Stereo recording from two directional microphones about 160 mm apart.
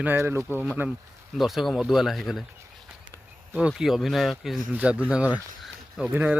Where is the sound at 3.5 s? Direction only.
5° right (ahead or behind).